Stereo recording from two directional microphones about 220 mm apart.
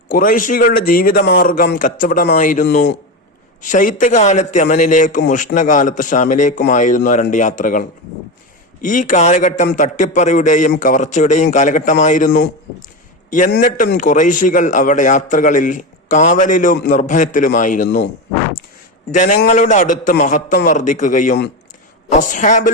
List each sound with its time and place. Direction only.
0.1 s speech: 40° left (ahead or behind)
13.5 s speech: 40° left (ahead or behind)
19.1 s speech: 35° left (ahead or behind)